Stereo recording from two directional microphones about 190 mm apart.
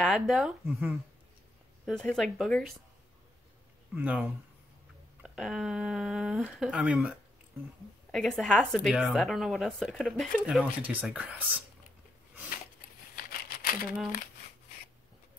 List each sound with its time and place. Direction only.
0.0 s speech: centre (ahead or behind)
3.9 s speech: 10° right (ahead or behind)
13.1 s a sound: 50° left (ahead or behind)